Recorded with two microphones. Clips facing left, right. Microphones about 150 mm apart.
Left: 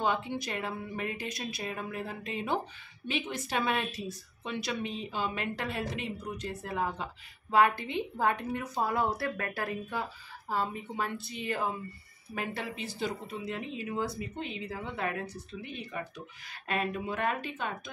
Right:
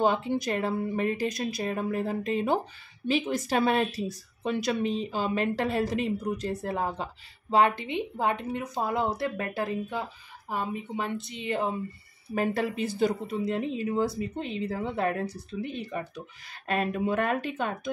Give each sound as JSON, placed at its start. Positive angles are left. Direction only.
{"t": 0.0, "sound": "speech", "side_deg": -40}
{"t": 7.5, "sound": "a woman's voice", "side_deg": -20}
{"t": 12.4, "sound": "speech", "side_deg": -45}